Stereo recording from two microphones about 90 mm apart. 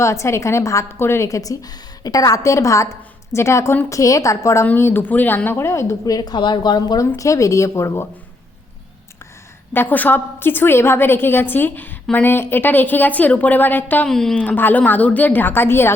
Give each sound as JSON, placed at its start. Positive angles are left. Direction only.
{"t": 0.0, "sound": "a woman's voice", "side_deg": 35}
{"t": 4.6, "sound": "a woman's voice", "side_deg": 25}
{"t": 6.1, "sound": "a woman's voice", "side_deg": 55}
{"t": 9.7, "sound": "a woman's voice", "side_deg": 20}
{"t": 14.1, "sound": "a woman's voice", "side_deg": 5}
{"t": 14.3, "sound": "a woman's voice", "side_deg": 20}